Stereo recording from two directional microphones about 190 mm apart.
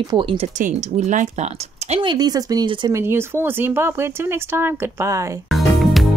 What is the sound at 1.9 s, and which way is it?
Speech, 25° right (ahead or behind).